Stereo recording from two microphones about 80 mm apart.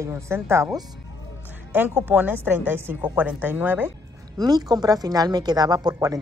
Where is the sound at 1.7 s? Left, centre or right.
Right.